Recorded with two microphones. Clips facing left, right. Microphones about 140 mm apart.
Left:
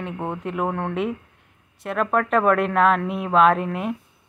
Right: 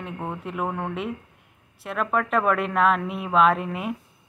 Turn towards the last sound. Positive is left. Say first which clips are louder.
# left 3 dB
turn(degrees=0)  # may be behind; listen again after turning